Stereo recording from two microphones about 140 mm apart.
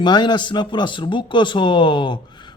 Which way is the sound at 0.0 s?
30° left (ahead or behind).